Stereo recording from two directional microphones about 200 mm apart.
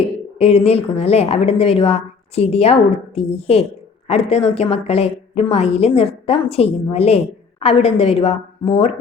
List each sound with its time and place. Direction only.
0.3 s a woman's voice: 30° left (ahead or behind)